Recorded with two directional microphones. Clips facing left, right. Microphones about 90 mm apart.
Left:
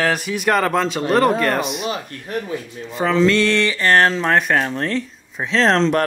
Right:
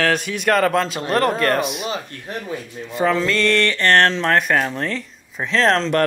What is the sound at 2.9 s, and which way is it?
Speech, centre (ahead or behind).